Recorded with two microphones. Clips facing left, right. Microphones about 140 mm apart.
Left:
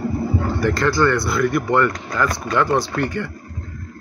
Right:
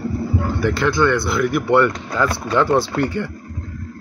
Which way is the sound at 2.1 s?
10° right (ahead or behind).